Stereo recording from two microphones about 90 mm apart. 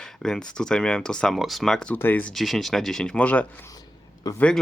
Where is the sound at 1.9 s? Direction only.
20° left (ahead or behind).